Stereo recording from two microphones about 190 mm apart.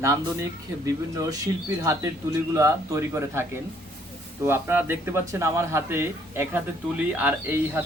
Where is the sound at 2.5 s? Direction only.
15° right (ahead or behind).